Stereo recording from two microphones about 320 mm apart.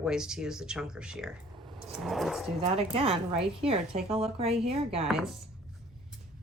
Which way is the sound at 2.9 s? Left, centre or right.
Centre.